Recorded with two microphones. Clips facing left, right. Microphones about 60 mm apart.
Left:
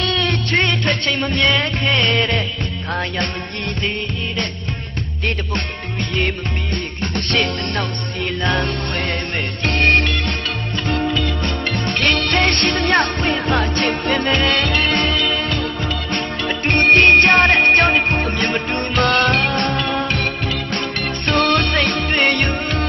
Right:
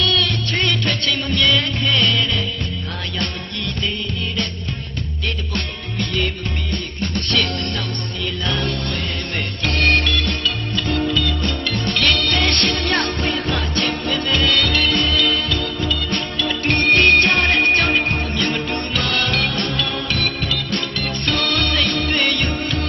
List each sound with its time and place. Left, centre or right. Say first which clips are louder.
0.0 s music: even; left
6.2 s music: left 2 dB; left
9.6 s music: left 2 dB; left
15.1 s music: even; left